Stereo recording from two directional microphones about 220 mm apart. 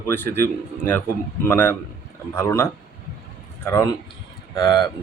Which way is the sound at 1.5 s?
10° left (ahead or behind).